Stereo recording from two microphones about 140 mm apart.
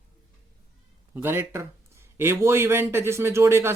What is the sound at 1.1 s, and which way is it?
Speech, 15° right (ahead or behind).